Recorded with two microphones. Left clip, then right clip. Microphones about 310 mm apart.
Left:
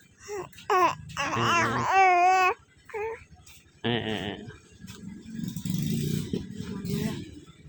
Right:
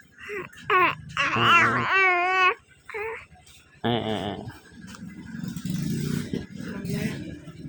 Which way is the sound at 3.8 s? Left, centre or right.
Centre.